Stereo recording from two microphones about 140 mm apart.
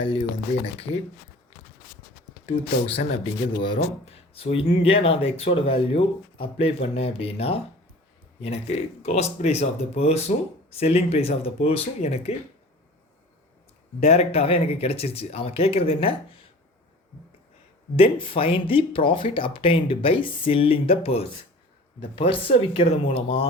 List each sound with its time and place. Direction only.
0.9 s speech: 45° left (ahead or behind)
2.5 s speech: 45° left (ahead or behind)
14.0 s speech: 45° left (ahead or behind)
17.9 s speech: 40° left (ahead or behind)